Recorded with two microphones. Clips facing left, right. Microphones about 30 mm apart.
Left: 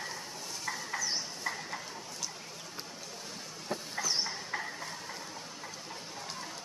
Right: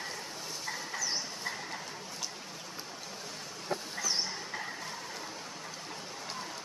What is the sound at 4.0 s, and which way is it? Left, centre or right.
Train, centre.